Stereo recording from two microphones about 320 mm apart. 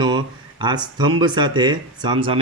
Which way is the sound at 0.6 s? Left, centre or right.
Centre.